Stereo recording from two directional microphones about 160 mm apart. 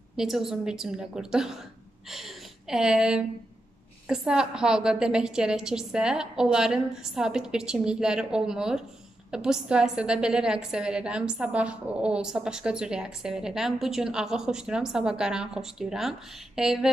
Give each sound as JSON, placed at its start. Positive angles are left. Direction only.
{"t": 0.1, "sound": "a woman's voice", "side_deg": 0}